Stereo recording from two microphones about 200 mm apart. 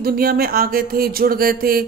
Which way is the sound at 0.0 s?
50° right (ahead or behind).